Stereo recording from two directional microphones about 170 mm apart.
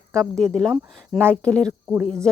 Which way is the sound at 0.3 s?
5° left (ahead or behind).